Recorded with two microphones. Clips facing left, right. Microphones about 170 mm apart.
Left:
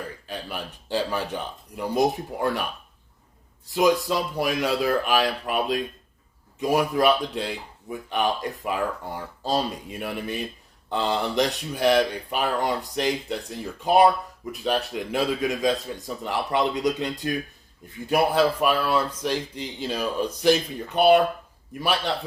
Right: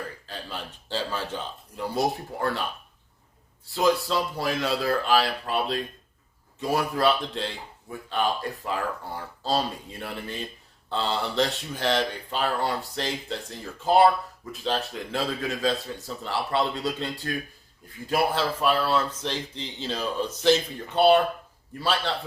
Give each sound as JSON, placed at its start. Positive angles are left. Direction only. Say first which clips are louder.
{"t": 0.3, "sound": "speech", "louder": "left 3 dB", "side_deg": 15}
{"t": 3.7, "sound": "speech", "louder": "left 2 dB", "side_deg": 15}